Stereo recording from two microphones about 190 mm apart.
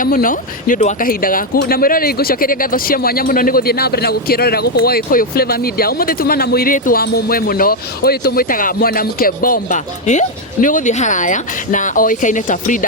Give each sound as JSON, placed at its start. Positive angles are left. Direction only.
{"t": 0.0, "sound": "speech", "side_deg": 45}